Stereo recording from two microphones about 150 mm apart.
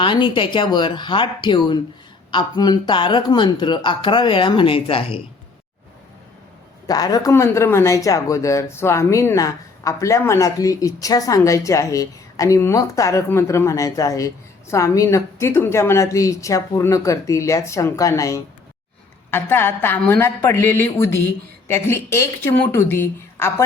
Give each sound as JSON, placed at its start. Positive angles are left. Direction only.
{"t": 0.0, "sound": "speech", "side_deg": 35}
{"t": 6.8, "sound": "speech", "side_deg": 25}